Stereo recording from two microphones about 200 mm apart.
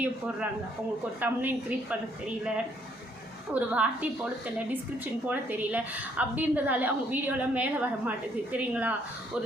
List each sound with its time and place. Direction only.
1.2 s a woman's voice: 10° right (ahead or behind)
3.5 s a woman's voice: 10° right (ahead or behind)
5.3 s a woman's voice: 10° right (ahead or behind)